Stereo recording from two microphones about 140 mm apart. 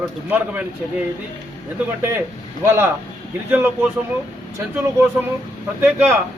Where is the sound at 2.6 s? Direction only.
15° right (ahead or behind).